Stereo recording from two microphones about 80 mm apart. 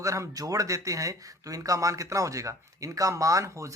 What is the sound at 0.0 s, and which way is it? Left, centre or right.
Speech, right.